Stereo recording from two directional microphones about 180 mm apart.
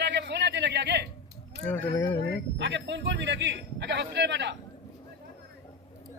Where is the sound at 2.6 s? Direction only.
80° right.